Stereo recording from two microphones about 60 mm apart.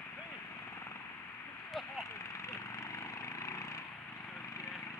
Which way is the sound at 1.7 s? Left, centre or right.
Centre.